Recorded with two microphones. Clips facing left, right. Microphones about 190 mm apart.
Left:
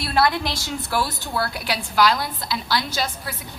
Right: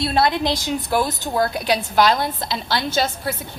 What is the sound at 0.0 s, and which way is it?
A woman's voice, 25° right (ahead or behind).